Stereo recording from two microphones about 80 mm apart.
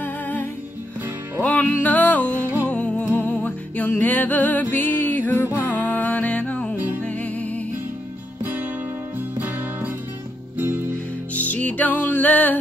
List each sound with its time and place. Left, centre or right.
0.0 s music: left
11.3 s music: centre